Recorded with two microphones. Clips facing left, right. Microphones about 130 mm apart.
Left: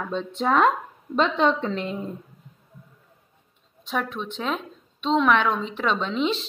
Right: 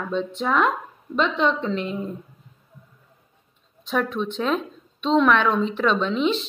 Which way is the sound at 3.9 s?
15° left (ahead or behind).